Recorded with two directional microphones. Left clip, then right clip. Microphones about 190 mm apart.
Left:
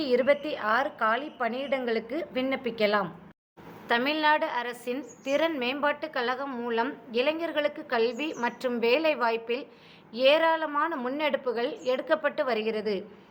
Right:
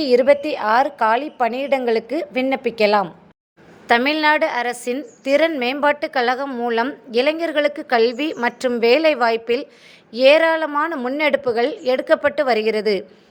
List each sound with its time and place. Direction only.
0.0 s a woman's voice: 35° right (ahead or behind)